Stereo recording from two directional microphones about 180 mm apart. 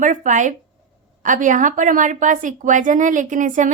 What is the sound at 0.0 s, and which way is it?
A woman's voice, 45° right (ahead or behind).